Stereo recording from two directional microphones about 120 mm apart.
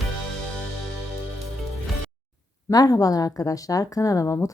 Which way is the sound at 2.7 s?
30° left (ahead or behind).